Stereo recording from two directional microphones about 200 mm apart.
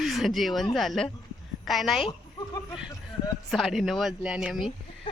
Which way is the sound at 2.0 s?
20° left (ahead or behind).